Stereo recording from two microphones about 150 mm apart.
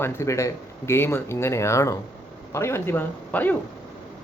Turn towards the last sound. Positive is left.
turn(degrees=10)  # may be behind; listen again after turning